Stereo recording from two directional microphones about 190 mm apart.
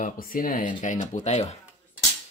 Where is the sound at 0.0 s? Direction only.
45° left (ahead or behind).